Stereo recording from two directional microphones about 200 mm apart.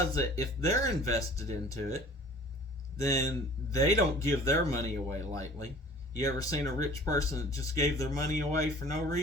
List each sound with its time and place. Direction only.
0.1 s speech: 15° left (ahead or behind)
3.0 s speech: 15° left (ahead or behind)